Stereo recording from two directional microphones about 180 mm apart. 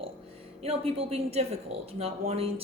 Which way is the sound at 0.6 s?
35° right (ahead or behind).